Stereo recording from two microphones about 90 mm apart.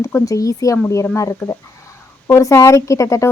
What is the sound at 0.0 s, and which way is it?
Speech, 30° left (ahead or behind).